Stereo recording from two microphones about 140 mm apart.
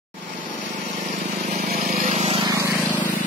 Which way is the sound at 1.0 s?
75° right (ahead or behind).